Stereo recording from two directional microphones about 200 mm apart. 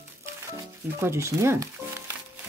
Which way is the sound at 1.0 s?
15° right (ahead or behind).